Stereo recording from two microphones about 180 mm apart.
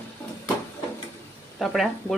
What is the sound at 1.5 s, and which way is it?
Speech, centre (ahead or behind).